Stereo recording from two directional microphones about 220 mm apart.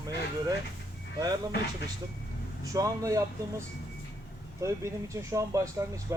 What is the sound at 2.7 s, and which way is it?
Speech, 15° right (ahead or behind).